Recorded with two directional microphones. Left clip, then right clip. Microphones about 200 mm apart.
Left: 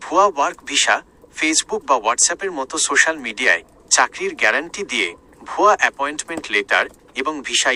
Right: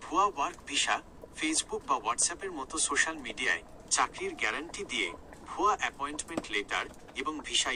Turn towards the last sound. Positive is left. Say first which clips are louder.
# left 12 dB
turn(degrees=40)  # may be behind; listen again after turning